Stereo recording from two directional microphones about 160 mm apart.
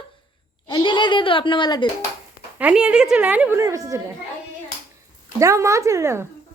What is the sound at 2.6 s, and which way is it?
A woman's voice, 5° right (ahead or behind).